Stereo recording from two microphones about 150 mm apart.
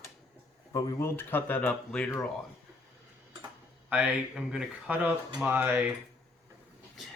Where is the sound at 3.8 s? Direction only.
10° right (ahead or behind).